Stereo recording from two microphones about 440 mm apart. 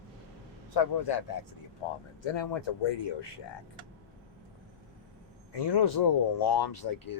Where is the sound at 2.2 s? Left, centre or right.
Left.